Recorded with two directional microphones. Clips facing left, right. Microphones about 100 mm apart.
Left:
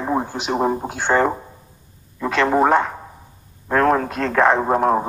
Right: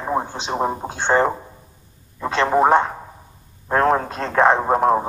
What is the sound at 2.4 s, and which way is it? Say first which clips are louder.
A man's voice: right 1 dB; 15° right (ahead or behind).